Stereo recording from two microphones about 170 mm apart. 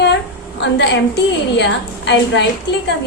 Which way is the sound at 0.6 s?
90° left.